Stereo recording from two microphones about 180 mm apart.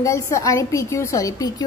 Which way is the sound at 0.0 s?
15° left (ahead or behind).